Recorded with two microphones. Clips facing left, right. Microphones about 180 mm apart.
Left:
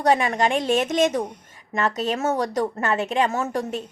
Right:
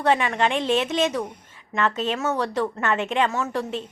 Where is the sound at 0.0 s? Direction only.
40° left (ahead or behind).